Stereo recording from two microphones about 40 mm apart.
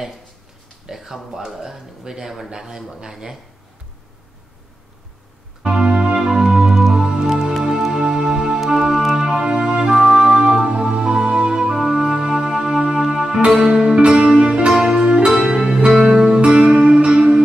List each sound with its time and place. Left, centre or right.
0.8 s speech: centre
5.6 s music: right